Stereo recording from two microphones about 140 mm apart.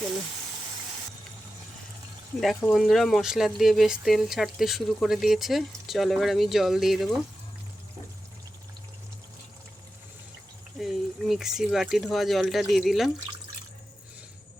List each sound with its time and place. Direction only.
2.4 s speech: centre (ahead or behind)
10.8 s speech: centre (ahead or behind)